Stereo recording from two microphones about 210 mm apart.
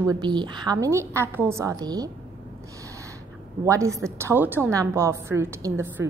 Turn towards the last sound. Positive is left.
turn(degrees=-10)  # may be behind; listen again after turning